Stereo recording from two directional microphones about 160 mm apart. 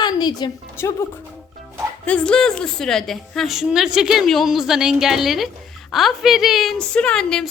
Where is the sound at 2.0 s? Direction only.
5° left (ahead or behind).